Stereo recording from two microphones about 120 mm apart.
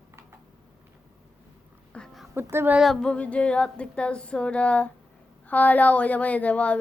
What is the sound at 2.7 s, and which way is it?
Speech, centre (ahead or behind).